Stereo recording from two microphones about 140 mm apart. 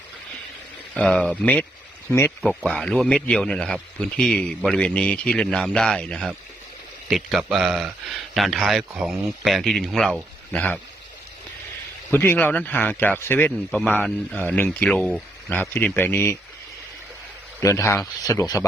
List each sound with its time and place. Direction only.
0.9 s speech: 10° left (ahead or behind)
12.1 s speech: 15° left (ahead or behind)
15.4 s speech: 15° left (ahead or behind)
17.6 s speech: 20° left (ahead or behind)